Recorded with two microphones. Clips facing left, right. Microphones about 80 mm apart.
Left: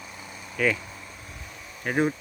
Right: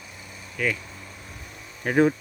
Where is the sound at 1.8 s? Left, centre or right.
Right.